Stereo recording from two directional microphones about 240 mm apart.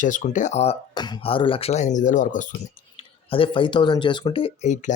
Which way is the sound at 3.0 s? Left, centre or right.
Left.